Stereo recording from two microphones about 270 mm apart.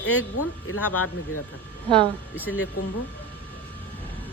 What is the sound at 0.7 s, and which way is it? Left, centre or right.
Speech, left.